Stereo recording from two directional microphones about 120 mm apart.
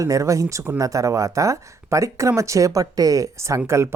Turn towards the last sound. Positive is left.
turn(degrees=-25)  # may be behind; listen again after turning